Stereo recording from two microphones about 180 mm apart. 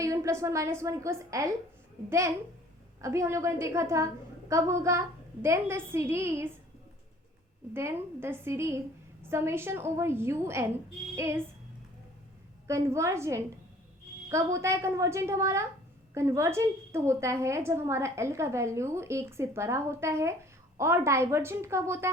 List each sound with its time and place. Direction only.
0.0 s a woman's voice: 15° right (ahead or behind)
7.7 s a woman's voice: 15° right (ahead or behind)
11.1 s music: 15° right (ahead or behind)
12.6 s a woman's voice: 15° right (ahead or behind)